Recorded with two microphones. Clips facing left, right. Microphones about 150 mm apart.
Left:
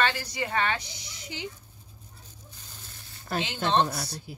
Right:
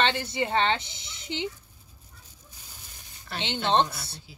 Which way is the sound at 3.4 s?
25° right (ahead or behind).